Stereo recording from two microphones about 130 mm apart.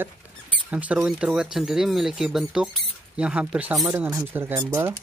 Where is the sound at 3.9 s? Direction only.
25° right (ahead or behind).